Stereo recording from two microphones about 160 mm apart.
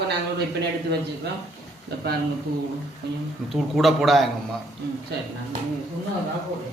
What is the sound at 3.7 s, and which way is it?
Speech, centre (ahead or behind).